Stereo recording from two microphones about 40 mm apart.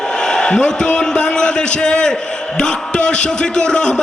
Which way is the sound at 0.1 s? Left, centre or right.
Centre.